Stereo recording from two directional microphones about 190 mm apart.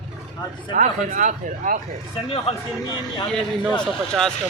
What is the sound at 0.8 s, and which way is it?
Speech, 40° right (ahead or behind).